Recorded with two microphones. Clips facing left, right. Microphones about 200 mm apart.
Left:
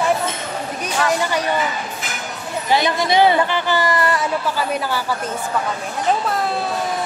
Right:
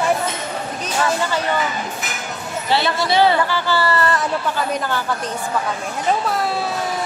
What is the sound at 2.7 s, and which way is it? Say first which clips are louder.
A woman's voice: left 1 dB; 15° left (ahead or behind).